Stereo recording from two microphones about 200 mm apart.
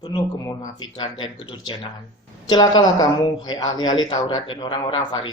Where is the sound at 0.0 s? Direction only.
20° left (ahead or behind).